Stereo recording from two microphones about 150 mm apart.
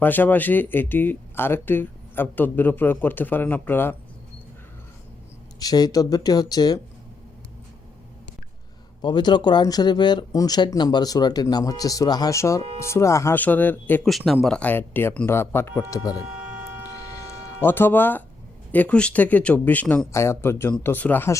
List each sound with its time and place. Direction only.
0.0 s speech: 10° left (ahead or behind)
5.5 s speech: 25° left (ahead or behind)
9.0 s speech: 30° left (ahead or behind); by 14.1 s 10° left (ahead or behind)
14.1 s speech: centre (ahead or behind); by 16.1 s 20° left (ahead or behind)
17.6 s speech: 15° left (ahead or behind)